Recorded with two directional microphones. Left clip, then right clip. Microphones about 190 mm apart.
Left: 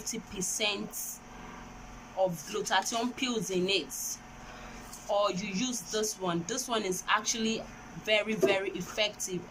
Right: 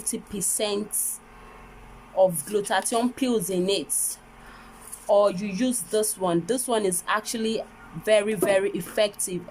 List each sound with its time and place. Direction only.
0.1 s speech: 35° right (ahead or behind)
2.1 s speech: 35° right (ahead or behind)
5.0 s speech: 35° right (ahead or behind)